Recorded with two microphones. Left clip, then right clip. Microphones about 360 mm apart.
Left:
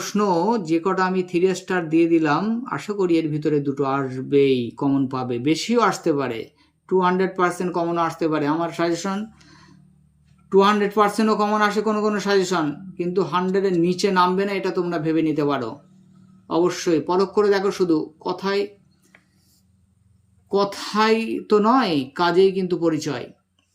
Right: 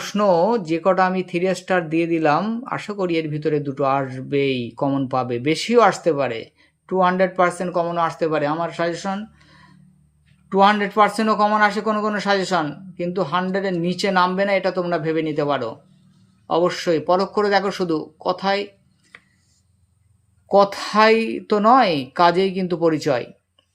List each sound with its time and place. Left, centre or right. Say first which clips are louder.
0.0 s speech: right 4 dB; centre
20.5 s a woman's voice: right 6 dB; centre